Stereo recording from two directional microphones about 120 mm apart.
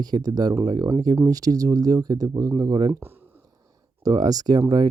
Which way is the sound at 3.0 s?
15° right (ahead or behind).